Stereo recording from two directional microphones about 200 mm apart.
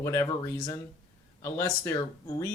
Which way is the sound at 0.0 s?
15° left (ahead or behind).